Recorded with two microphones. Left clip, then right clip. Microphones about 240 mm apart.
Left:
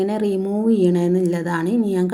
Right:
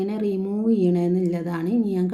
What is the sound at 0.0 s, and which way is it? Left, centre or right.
A woman's voice, centre.